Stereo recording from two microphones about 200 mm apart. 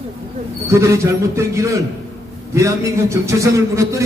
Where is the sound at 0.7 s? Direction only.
15° right (ahead or behind).